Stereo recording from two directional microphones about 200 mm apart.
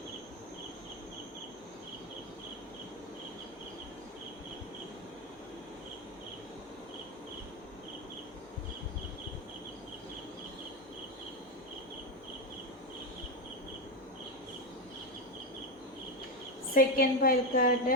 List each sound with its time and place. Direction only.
16.7 s a woman's voice: 45° left (ahead or behind)